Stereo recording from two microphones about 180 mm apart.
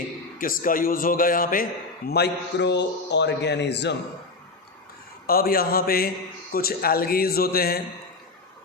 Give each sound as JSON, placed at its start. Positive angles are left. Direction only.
{"t": 0.3, "sound": "a man's voice", "side_deg": 50}
{"t": 2.0, "sound": "a man's voice", "side_deg": 65}
{"t": 5.2, "sound": "speech", "side_deg": 55}